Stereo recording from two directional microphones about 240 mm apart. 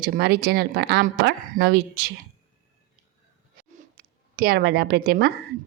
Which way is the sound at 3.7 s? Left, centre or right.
Right.